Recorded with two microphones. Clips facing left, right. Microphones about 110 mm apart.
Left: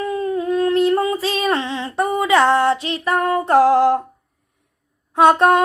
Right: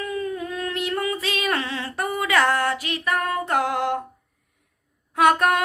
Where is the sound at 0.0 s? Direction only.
30° left (ahead or behind).